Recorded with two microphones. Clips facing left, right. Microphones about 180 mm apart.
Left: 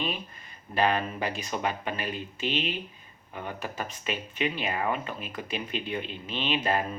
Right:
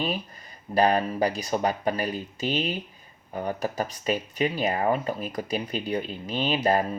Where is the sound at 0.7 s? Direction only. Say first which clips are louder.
Right 4 dB; 40° right (ahead or behind).